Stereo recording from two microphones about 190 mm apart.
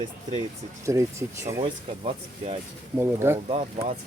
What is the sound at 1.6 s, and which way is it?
Speech, 30° right (ahead or behind).